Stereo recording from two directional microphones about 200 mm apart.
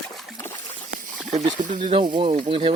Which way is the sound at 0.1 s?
Centre (ahead or behind).